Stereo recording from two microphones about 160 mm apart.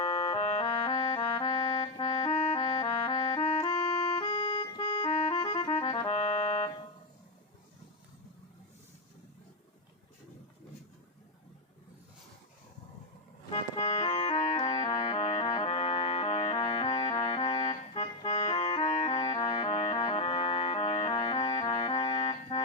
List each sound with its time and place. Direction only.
0.0 s music: 35° left (ahead or behind)
13.5 s music: 40° left (ahead or behind)
14.8 s music: 25° left (ahead or behind)
15.1 s music: 45° left (ahead or behind); by 17.2 s 25° left (ahead or behind)
17.3 s music: 40° left (ahead or behind)
19.2 s music: 25° left (ahead or behind)
20.1 s music: 35° left (ahead or behind)
20.9 s music: 25° left (ahead or behind)